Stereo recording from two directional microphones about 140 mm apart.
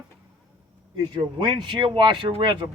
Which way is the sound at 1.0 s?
35° right (ahead or behind).